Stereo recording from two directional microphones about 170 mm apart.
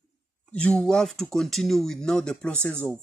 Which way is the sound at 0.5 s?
5° left (ahead or behind).